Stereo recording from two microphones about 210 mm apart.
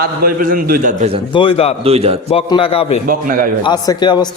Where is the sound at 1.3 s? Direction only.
25° left (ahead or behind).